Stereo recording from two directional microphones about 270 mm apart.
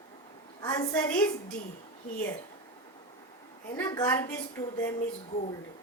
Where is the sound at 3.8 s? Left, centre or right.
Centre.